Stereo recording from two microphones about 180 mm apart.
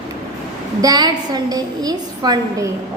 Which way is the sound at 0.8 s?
20° right (ahead or behind).